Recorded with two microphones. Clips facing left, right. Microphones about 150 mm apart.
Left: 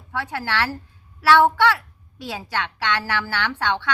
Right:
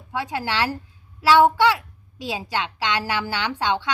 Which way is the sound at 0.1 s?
15° right (ahead or behind).